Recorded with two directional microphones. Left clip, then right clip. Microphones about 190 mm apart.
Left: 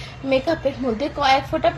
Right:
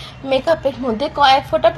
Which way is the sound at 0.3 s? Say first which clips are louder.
Right 4 dB; 25° right (ahead or behind).